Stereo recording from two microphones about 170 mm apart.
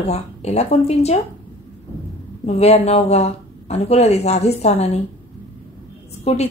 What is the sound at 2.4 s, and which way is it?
Speech, 35° left (ahead or behind).